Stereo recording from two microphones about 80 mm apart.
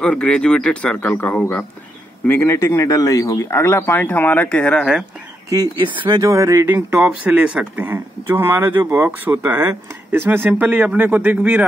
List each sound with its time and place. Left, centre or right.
0.0 s a man's voice: centre
2.2 s speech: left
5.8 s speech: right
6.3 s speech: right
6.7 s speech: centre
7.8 s speech: right